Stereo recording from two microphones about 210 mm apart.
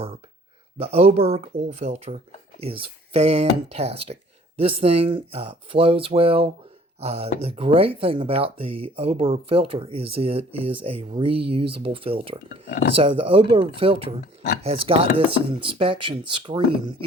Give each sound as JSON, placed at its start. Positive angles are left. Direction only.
{"t": 0.8, "sound": "speech", "side_deg": -30}
{"t": 12.5, "sound": "speech", "side_deg": 60}
{"t": 13.0, "sound": "speech", "side_deg": -25}